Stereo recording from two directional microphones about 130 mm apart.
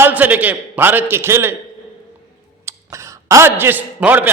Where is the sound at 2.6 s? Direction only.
25° right (ahead or behind).